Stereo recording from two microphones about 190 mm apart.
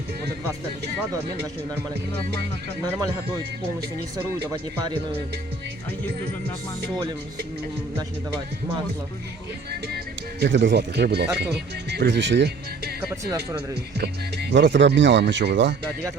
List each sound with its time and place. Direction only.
4.5 s speech: 25° right (ahead or behind)
10.4 s speech: 65° right (ahead or behind)
14.0 s speech: 65° right (ahead or behind)